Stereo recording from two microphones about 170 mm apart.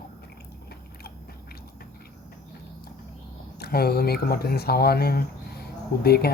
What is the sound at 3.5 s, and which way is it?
Speech, 65° left (ahead or behind).